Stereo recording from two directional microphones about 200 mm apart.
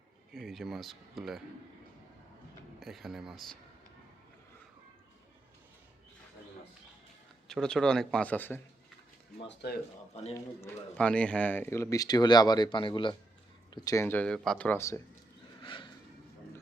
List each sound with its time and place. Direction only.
0.3 s speech: centre (ahead or behind)
2.8 s speech: centre (ahead or behind)
7.4 s speech: 5° left (ahead or behind)
9.5 s speech: 55° left (ahead or behind)
10.3 s a man's voice: 10° left (ahead or behind)
15.6 s a sound: 25° left (ahead or behind)